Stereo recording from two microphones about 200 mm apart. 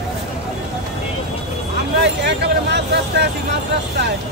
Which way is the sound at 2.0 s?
60° right (ahead or behind).